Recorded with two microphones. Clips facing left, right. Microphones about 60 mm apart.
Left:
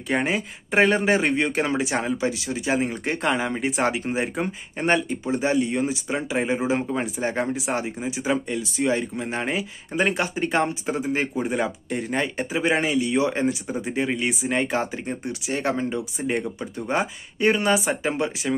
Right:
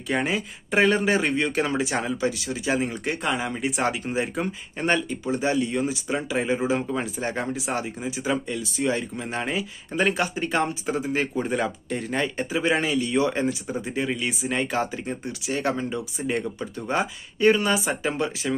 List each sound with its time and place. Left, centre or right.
0.1 s speech: left
11.3 s speech: centre
11.9 s speech: left